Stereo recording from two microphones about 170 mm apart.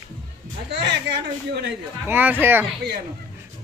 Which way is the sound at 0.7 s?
90° right.